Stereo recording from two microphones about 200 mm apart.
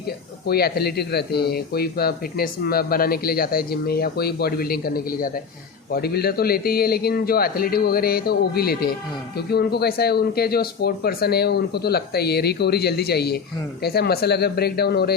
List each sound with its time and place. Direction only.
0.4 s speech: 50° left (ahead or behind)